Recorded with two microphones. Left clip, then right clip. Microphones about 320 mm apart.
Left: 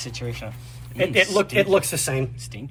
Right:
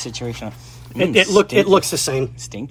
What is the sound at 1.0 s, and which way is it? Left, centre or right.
Speech, right.